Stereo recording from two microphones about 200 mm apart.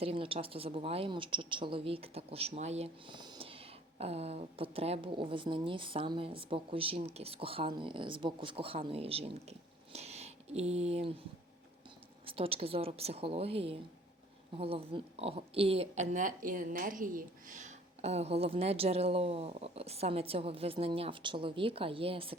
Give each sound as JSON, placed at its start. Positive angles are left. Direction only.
{"t": 0.0, "sound": "a woman's voice", "side_deg": -30}
{"t": 12.2, "sound": "a woman's voice", "side_deg": -25}